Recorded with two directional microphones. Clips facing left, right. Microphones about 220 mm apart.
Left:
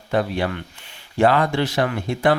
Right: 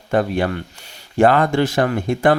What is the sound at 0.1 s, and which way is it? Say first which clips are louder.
Speech: right 3 dB; 50° right (ahead or behind).